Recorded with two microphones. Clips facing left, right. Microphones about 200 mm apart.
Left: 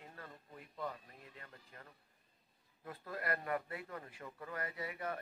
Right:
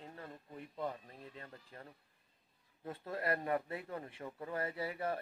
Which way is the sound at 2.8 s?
25° right (ahead or behind).